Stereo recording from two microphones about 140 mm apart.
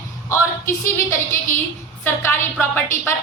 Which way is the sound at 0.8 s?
20° left (ahead or behind).